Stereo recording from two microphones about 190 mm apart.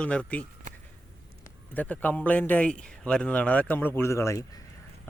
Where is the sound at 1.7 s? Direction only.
10° left (ahead or behind).